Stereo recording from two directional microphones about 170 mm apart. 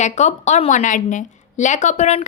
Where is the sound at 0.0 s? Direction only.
40° left (ahead or behind).